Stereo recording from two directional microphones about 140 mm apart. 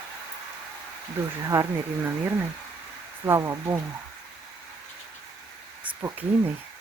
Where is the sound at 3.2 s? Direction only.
20° right (ahead or behind).